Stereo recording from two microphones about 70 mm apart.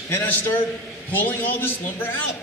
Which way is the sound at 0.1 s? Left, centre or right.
Left.